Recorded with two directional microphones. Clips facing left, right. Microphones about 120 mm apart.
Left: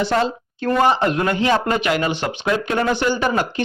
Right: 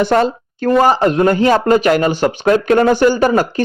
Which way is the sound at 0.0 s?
50° right (ahead or behind).